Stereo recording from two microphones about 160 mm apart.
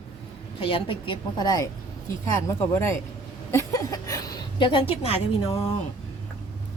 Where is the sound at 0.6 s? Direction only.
35° left (ahead or behind).